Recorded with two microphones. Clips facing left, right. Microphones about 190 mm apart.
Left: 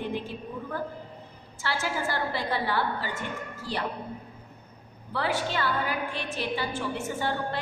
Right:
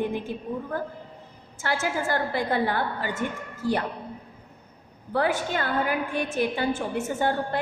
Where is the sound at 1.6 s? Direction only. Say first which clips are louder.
Right 3 dB; 50° right (ahead or behind).